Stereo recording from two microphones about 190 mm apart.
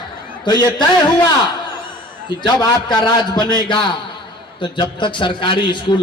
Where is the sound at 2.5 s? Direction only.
20° left (ahead or behind).